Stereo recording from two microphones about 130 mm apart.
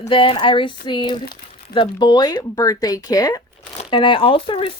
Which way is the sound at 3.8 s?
40° left (ahead or behind).